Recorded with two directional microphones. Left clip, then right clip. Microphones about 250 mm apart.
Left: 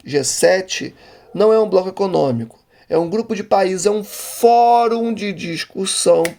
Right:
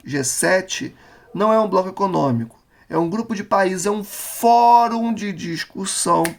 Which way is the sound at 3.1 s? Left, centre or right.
Right.